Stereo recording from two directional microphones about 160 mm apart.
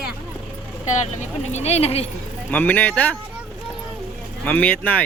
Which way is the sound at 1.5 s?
40° left (ahead or behind).